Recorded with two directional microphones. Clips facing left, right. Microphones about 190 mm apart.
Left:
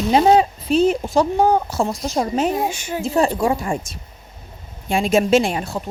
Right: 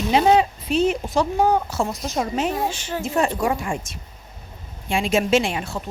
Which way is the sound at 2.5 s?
10° left (ahead or behind).